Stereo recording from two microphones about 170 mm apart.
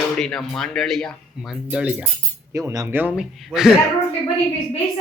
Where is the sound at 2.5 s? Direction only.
20° right (ahead or behind); by 3.7 s centre (ahead or behind).